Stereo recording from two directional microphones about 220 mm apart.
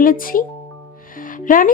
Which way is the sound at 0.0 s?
40° left (ahead or behind).